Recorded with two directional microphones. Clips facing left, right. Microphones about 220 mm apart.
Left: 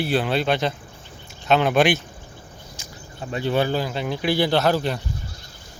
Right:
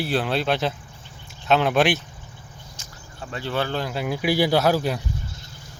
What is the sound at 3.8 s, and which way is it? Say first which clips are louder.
Speech: left 1 dB; centre (ahead or behind).